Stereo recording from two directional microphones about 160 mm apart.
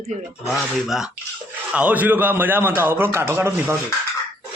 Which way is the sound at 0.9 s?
Centre (ahead or behind).